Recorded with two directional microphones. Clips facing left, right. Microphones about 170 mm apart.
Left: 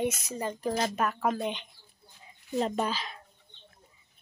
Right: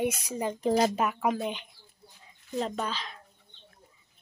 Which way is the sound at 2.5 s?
5° left (ahead or behind).